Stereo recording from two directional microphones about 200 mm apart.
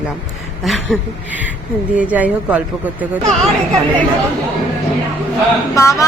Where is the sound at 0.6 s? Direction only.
Centre (ahead or behind).